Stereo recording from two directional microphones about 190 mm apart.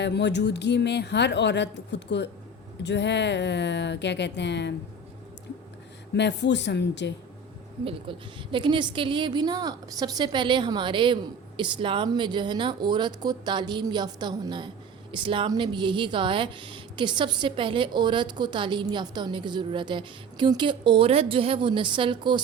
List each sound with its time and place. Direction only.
0.0 s a woman's voice: 65° left (ahead or behind)
6.1 s speech: 65° left (ahead or behind)
8.1 s speech: 25° right (ahead or behind)